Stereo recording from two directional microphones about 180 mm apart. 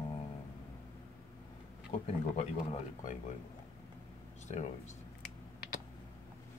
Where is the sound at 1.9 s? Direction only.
35° left (ahead or behind).